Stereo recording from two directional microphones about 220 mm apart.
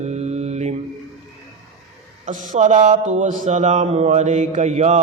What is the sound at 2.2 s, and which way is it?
A man's voice, 35° right (ahead or behind).